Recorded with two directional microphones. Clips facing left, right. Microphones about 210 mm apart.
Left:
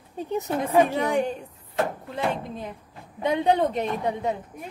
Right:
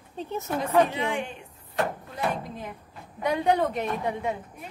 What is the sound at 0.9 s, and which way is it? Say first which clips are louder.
Speech: left 6 dB; 40° left (ahead or behind).